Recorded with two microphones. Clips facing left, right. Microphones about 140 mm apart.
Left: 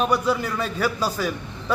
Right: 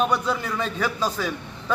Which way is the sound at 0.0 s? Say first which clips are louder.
Left 2 dB; 5° left (ahead or behind).